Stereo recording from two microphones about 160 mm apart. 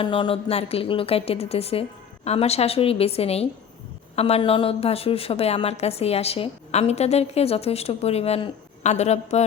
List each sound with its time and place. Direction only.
0.0 s a woman's voice: 30° left (ahead or behind)